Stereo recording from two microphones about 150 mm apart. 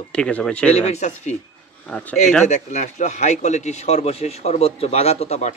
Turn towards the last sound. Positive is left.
turn(degrees=45)  # may be behind; listen again after turning